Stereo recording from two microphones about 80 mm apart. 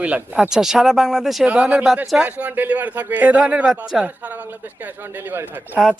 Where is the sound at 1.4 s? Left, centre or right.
Centre.